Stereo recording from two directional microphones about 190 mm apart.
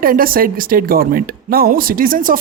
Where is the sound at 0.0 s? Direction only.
50° right (ahead or behind).